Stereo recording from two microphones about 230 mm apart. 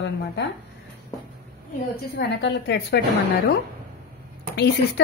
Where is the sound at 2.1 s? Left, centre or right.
Left.